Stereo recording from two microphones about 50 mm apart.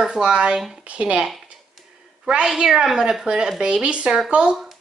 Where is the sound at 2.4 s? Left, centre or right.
Centre.